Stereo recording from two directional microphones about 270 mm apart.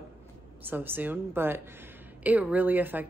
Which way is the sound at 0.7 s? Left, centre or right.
Centre.